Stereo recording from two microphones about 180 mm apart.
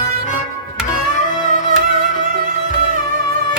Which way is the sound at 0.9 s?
45° left (ahead or behind).